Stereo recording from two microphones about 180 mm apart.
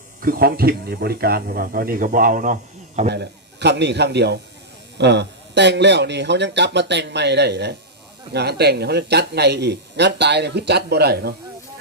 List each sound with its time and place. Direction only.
0.2 s speech: 55° right (ahead or behind)
3.1 s speech: 70° right (ahead or behind)